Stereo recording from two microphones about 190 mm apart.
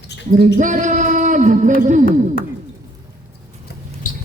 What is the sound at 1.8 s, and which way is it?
Music, 40° right (ahead or behind).